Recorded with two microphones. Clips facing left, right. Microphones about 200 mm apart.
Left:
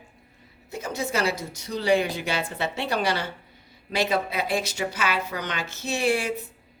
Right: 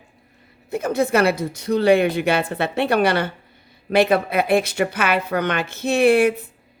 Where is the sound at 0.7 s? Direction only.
55° right (ahead or behind).